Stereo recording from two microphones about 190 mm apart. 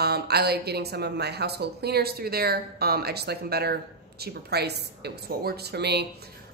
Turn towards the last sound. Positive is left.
turn(degrees=-60)  # may be behind; listen again after turning